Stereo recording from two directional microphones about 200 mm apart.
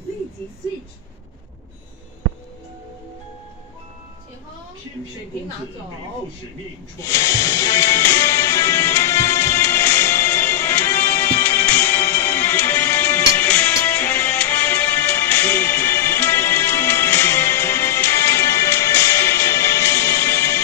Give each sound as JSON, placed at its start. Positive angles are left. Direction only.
{"t": 7.0, "sound": "music", "side_deg": 15}